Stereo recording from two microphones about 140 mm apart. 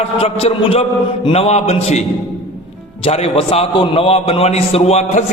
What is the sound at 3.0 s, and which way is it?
A man's voice, 40° left (ahead or behind).